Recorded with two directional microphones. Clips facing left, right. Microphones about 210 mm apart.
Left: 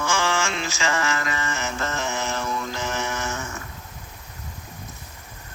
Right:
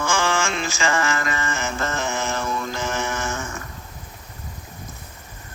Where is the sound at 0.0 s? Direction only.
50° right (ahead or behind).